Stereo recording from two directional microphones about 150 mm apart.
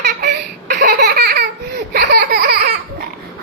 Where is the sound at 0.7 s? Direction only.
80° right.